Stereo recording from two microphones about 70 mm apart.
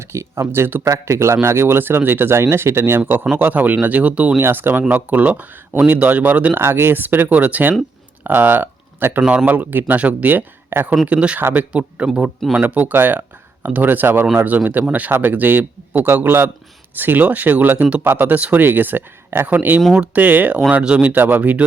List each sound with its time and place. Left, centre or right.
0.1 s speech: right
3.3 s speech: right
4.4 s speech: right
6.6 s speech: right
11.0 s speech: centre
11.3 s speech: right
11.7 s speech: centre
12.5 s speech: right